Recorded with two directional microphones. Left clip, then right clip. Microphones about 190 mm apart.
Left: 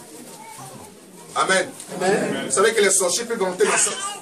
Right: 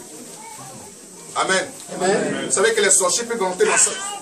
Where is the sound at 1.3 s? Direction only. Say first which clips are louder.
Left 1 dB; centre (ahead or behind).